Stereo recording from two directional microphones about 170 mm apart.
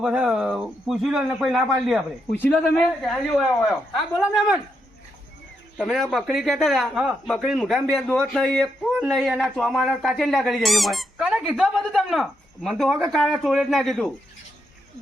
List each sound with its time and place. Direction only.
0.0 s speech: 5° right (ahead or behind)
5.7 s speech: centre (ahead or behind)